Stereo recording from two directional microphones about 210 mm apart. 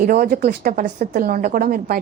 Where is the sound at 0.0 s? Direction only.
45° right (ahead or behind).